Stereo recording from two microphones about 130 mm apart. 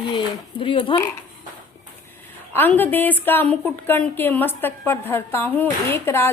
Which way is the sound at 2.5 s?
15° left (ahead or behind).